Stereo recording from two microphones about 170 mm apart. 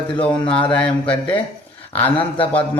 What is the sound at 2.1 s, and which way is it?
Speech, 30° left (ahead or behind).